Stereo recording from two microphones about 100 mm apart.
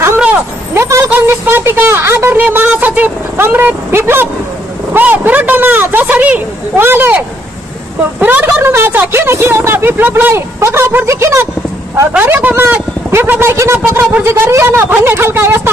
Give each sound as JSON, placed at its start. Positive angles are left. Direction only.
{"t": 0.7, "sound": "speech", "side_deg": -25}
{"t": 8.2, "sound": "speech", "side_deg": -15}
{"t": 12.1, "sound": "speech", "side_deg": -15}